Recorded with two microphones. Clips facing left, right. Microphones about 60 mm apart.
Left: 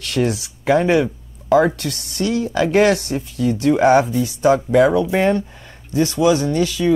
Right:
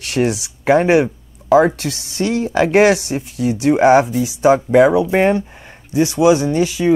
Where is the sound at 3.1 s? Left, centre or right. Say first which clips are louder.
Right 1 dB; centre.